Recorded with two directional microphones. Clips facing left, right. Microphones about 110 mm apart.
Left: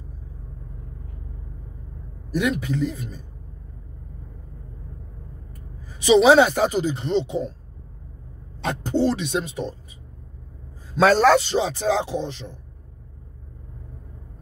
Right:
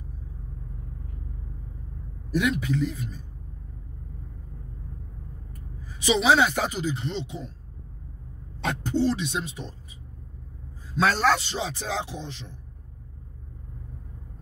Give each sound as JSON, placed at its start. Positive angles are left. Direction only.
{"t": 2.4, "sound": "speech", "side_deg": 40}
{"t": 6.0, "sound": "speech", "side_deg": 40}
{"t": 8.9, "sound": "a man's voice", "side_deg": 50}
{"t": 11.0, "sound": "a man's voice", "side_deg": 45}